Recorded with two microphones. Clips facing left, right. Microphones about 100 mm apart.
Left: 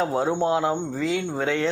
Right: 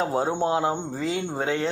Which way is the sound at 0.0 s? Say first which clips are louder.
Left 1 dB; 30° right (ahead or behind).